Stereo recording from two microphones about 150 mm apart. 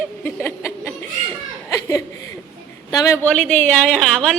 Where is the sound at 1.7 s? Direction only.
20° left (ahead or behind).